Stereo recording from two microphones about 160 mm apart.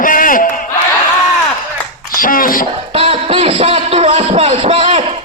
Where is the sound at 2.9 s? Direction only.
35° right (ahead or behind).